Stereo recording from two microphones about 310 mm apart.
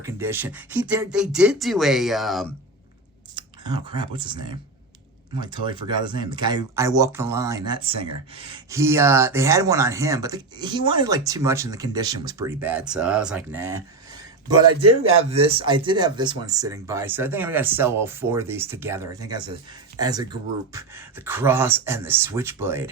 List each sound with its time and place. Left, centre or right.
0.0 s speech: centre
3.3 s speech: centre
14.8 s a man's voice: right
15.2 s speech: centre